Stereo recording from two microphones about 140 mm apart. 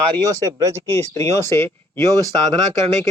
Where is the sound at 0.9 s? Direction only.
20° left (ahead or behind).